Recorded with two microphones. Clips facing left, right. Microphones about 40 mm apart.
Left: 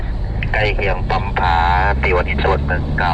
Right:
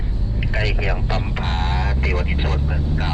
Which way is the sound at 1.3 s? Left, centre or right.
Left.